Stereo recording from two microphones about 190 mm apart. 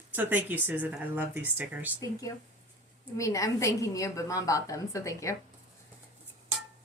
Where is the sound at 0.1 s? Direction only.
10° right (ahead or behind).